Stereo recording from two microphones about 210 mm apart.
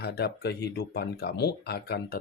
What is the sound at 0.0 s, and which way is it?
Speech, 50° left (ahead or behind).